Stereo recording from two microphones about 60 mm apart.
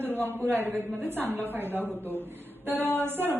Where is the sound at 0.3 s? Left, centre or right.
Right.